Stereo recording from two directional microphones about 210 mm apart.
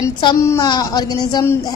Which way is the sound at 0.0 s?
20° left (ahead or behind).